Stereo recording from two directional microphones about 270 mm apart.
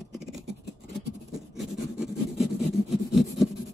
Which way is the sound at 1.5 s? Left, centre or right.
Centre.